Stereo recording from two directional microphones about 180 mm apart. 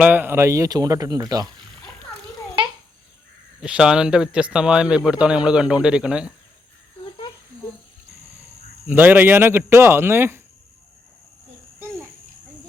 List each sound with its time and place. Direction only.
0.0 s speech: 10° right (ahead or behind)
3.6 s speech: 5° right (ahead or behind)
7.0 s a sound: 25° left (ahead or behind)
8.9 s speech: 10° right (ahead or behind)